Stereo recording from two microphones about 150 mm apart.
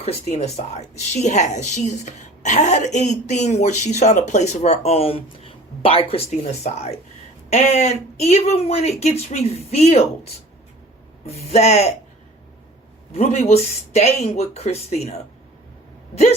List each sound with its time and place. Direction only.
0.0 s a woman's voice: 45° left (ahead or behind)
11.3 s a woman's voice: 45° left (ahead or behind)
13.1 s a woman's voice: 45° left (ahead or behind)